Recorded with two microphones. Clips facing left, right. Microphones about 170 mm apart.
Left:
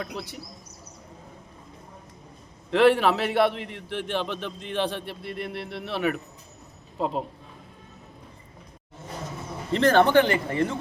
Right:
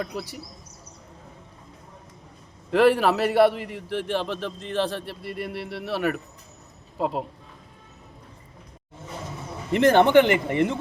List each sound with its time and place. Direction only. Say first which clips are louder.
0.0 s a man's voice: right 3 dB; 5° right (ahead or behind)
2.6 s a man's voice: even; 5° right (ahead or behind)
9.7 s speech: right 2 dB; 20° right (ahead or behind)